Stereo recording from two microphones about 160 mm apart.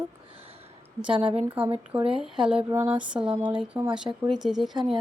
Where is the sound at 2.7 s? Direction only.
10° right (ahead or behind).